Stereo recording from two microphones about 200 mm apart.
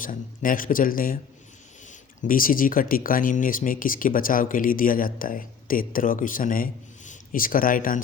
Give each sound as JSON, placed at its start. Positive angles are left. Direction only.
{"t": 0.0, "sound": "speech", "side_deg": 45}